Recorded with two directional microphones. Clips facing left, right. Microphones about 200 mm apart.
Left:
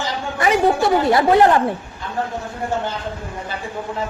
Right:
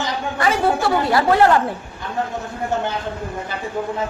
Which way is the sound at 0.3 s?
20° left (ahead or behind).